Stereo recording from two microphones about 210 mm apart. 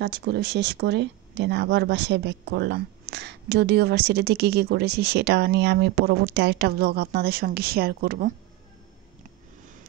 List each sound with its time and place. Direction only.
0.0 s speech: 55° right (ahead or behind)